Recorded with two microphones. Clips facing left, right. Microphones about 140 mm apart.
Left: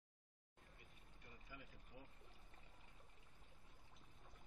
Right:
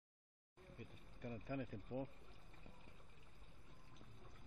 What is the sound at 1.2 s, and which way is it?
Speech, 70° right (ahead or behind).